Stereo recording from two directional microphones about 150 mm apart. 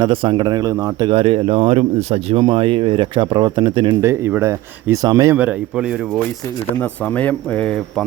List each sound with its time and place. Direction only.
0.0 s speech: 35° right (ahead or behind)
1.1 s speech: 40° right (ahead or behind)
4.0 s speech: 15° right (ahead or behind)
5.4 s speech: 5° right (ahead or behind)
6.7 s speech: 10° left (ahead or behind)